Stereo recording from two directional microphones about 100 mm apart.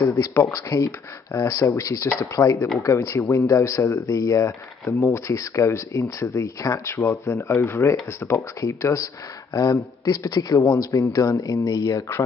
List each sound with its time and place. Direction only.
0.1 s speech: 25° left (ahead or behind)